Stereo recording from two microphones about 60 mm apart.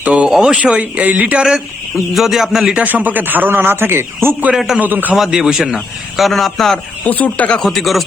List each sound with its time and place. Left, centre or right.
0.0 s speech: right
0.3 s speech: centre
0.5 s speech: centre
2.1 s a man's voice: centre
2.8 s a man's voice: right
4.5 s speech: centre
4.8 s a man's voice: right
5.1 s a man's voice: centre
7.1 s speech: left
7.6 s a man's voice: centre